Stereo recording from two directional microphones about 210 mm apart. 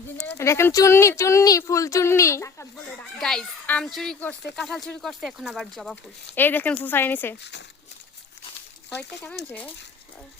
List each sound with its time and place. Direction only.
0.3 s speech: 15° left (ahead or behind)
3.2 s speech: centre (ahead or behind)
9.0 s speech: 10° left (ahead or behind)